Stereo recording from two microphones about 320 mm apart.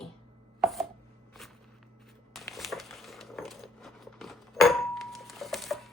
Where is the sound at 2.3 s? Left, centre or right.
Centre.